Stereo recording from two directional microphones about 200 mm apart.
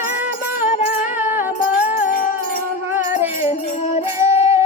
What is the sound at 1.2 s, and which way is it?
Music, 10° right (ahead or behind).